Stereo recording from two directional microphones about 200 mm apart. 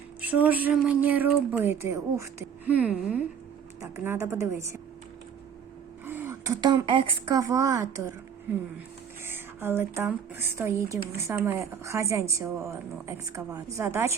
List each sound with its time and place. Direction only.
0.2 s speech: 5° right (ahead or behind)
6.1 s speech: 10° right (ahead or behind)
9.2 s speech: 10° right (ahead or behind)